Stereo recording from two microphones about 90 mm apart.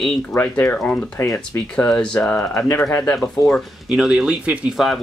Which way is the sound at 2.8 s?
10° left (ahead or behind).